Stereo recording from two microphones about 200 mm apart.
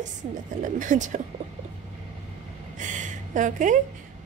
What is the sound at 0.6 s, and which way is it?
Speech, 40° right (ahead or behind).